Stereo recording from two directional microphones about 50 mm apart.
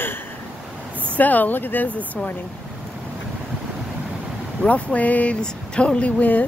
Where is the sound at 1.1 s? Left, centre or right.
Left.